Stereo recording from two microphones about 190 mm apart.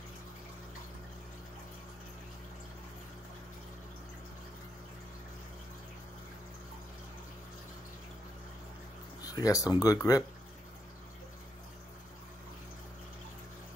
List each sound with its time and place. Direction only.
9.2 s speech: 20° left (ahead or behind)